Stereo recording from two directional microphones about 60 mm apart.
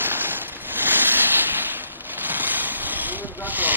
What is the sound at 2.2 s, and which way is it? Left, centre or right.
Vehicle, right.